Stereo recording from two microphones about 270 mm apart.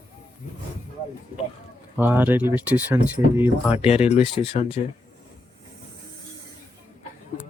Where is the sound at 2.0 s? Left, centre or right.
Centre.